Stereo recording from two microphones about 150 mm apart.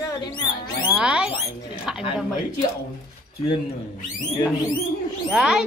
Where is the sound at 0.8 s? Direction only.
5° right (ahead or behind).